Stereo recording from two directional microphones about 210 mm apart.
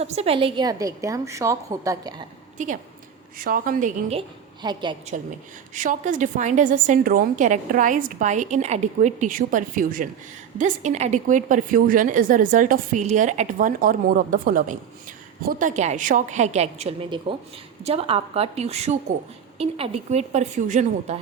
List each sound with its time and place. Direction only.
0.0 s a woman's voice: 30° right (ahead or behind)
2.6 s a woman's voice: 35° right (ahead or behind)
4.6 s a woman's voice: 20° right (ahead or behind)
5.7 s a woman's voice: 40° right (ahead or behind)